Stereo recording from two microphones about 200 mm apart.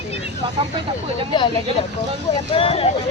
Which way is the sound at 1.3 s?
25° left (ahead or behind).